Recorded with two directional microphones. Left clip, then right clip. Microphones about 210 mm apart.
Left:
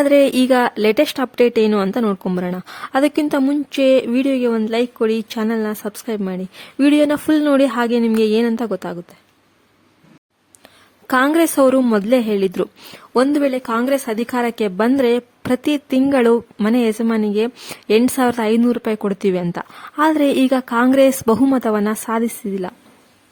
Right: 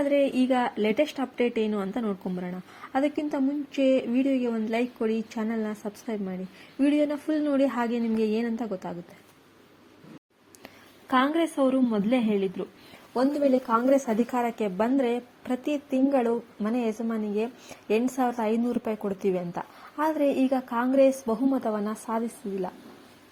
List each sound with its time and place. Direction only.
0.0 s a woman's voice: 45° left (ahead or behind)
11.1 s a woman's voice: 40° left (ahead or behind)